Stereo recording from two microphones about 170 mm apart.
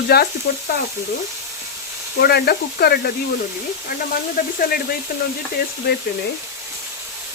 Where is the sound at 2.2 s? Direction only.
70° left (ahead or behind).